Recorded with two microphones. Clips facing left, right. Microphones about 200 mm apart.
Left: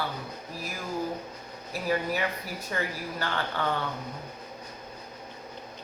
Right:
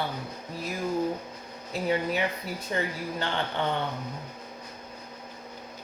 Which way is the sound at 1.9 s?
25° right (ahead or behind).